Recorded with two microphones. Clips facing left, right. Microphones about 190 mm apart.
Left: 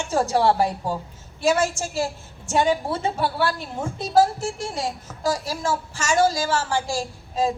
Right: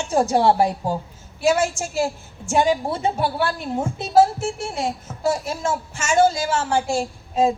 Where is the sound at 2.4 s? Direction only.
15° right (ahead or behind).